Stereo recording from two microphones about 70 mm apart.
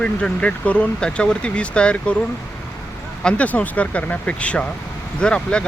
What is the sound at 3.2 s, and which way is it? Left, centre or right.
Speech, centre.